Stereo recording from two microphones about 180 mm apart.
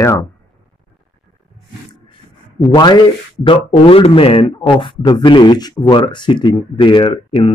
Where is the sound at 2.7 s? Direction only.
25° left (ahead or behind).